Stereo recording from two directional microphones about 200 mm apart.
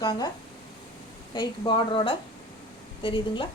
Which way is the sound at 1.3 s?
20° left (ahead or behind).